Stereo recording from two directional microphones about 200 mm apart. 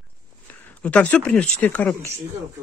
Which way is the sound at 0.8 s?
5° left (ahead or behind).